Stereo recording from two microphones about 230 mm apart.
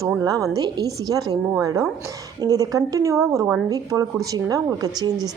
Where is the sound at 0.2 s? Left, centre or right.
Centre.